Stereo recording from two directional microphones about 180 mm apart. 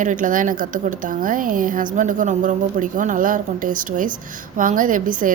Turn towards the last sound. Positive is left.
turn(degrees=-50)  # may be behind; listen again after turning